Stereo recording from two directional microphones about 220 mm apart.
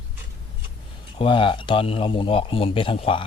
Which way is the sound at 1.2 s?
20° left (ahead or behind).